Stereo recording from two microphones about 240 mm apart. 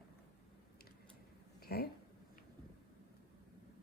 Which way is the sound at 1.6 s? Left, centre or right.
Left.